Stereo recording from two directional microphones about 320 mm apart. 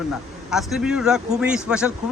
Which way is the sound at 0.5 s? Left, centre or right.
Centre.